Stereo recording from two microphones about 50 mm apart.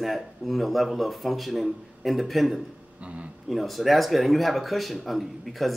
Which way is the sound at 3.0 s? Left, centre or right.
Right.